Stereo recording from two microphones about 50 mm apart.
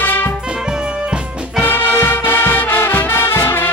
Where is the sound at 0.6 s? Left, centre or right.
Centre.